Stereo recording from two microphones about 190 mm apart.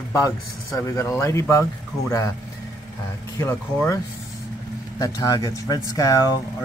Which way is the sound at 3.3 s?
15° left (ahead or behind).